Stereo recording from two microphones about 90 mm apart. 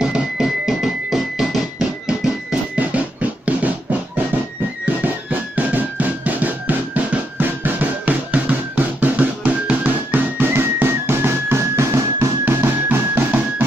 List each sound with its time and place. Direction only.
0.0 s music: 5° right (ahead or behind)
2.7 s music: 15° right (ahead or behind)
5.6 s music: 15° right (ahead or behind)